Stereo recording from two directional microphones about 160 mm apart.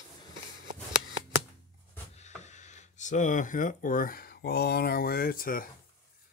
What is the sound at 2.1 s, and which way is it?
Speech, 45° left (ahead or behind).